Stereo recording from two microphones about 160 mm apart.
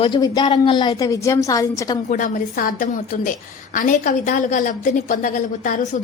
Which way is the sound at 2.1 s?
55° left (ahead or behind).